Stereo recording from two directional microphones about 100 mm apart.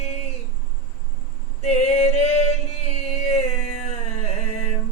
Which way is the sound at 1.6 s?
90° left.